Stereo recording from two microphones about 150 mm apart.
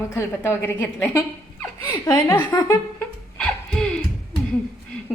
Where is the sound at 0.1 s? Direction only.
15° left (ahead or behind).